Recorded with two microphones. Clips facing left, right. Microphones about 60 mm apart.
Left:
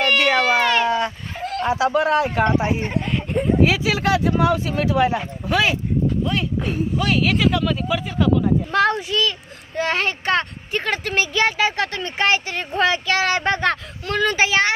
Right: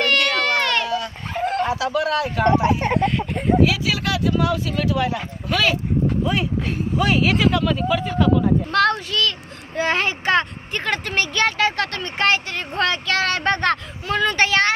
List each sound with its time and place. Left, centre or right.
0.0 s a sound: centre
0.8 s dog: left
1.4 s a sound: right
1.7 s speech: left
3.6 s speech: left
6.2 s speech: centre
8.7 s a child's voice: centre
9.8 s speech: centre